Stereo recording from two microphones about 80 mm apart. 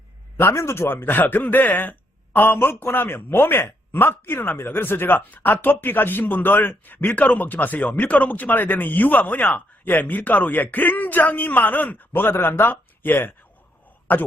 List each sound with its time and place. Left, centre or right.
0.3 s speech: left